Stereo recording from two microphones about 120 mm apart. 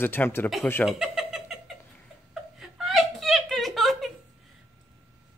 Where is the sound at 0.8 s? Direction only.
Centre (ahead or behind).